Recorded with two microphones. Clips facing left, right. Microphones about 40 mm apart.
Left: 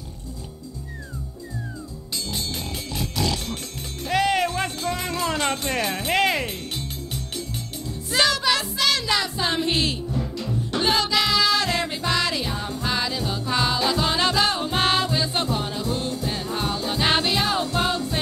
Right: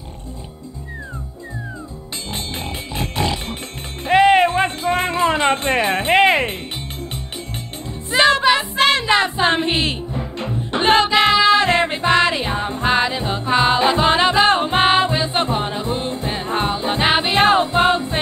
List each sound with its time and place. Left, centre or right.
2.3 s pig: right
4.0 s music: right
8.1 s music: right
17.4 s music: right